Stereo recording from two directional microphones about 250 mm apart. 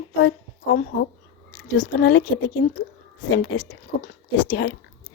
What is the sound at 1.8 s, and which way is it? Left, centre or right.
Speech, left.